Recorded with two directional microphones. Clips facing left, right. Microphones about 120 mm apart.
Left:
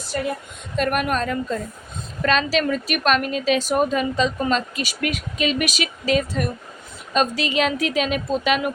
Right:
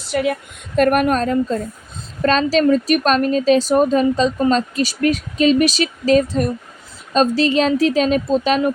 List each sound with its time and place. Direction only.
0.0 s a woman's voice: 80° right
0.8 s speech: 45° right (ahead or behind)